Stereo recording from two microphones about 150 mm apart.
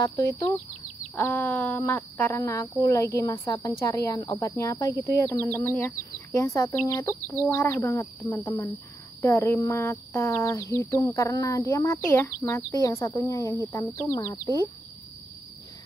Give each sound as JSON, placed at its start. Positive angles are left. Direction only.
{"t": 0.0, "sound": "speech", "side_deg": 20}
{"t": 2.4, "sound": "speech", "side_deg": 20}